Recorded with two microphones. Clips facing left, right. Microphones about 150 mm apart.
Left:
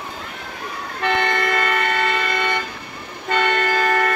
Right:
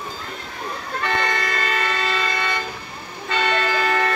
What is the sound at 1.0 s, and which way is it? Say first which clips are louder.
Vehicle: left 4 dB; 60° left (ahead or behind).